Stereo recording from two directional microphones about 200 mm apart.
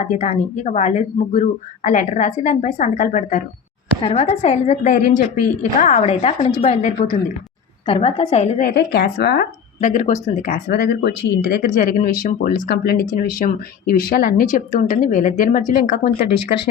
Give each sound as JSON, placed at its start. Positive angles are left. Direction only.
{"t": 0.0, "sound": "a woman's voice", "side_deg": 35}
{"t": 8.6, "sound": "speech", "side_deg": 55}
{"t": 11.7, "sound": "speech", "side_deg": 45}